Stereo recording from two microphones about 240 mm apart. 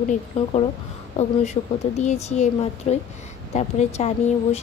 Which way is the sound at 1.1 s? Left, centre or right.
Left.